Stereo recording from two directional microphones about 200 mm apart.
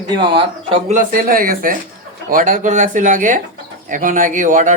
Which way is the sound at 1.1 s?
45° right (ahead or behind).